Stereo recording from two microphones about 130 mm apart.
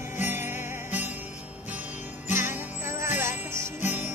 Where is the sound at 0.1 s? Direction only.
15° right (ahead or behind).